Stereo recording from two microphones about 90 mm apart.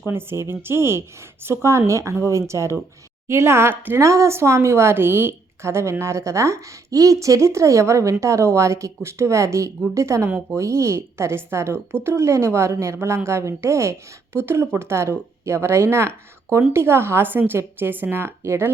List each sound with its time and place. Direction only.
0.0 s speech: 25° right (ahead or behind)